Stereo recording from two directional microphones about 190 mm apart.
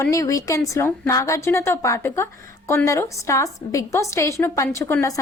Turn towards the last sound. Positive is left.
turn(degrees=15)  # may be behind; listen again after turning